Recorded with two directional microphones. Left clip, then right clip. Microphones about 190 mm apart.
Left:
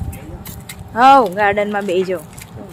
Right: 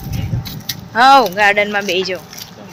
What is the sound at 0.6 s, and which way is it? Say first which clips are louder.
Keys jangling: right 2 dB; 5° left (ahead or behind).